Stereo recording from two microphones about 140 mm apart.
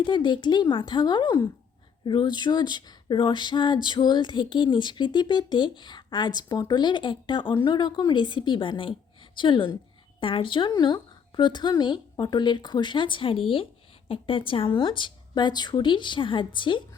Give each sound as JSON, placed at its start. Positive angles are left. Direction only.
{"t": 0.0, "sound": "speech", "side_deg": 35}